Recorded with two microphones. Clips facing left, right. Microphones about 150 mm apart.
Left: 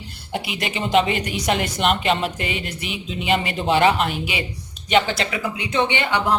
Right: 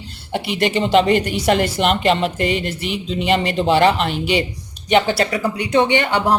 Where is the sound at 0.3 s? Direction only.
Centre (ahead or behind).